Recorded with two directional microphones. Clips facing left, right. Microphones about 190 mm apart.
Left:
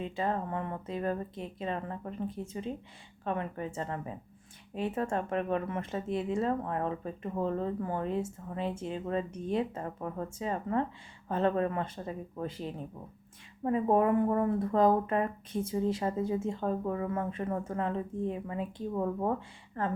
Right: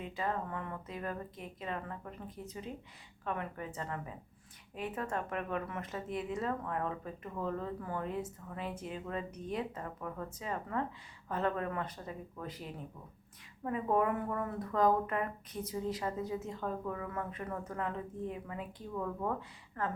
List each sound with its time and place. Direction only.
0.0 s speech: 30° left (ahead or behind)
13.7 s speech: 30° left (ahead or behind)